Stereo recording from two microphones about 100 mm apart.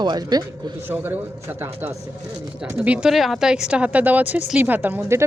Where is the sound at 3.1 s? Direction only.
Centre (ahead or behind); by 5.0 s 20° right (ahead or behind).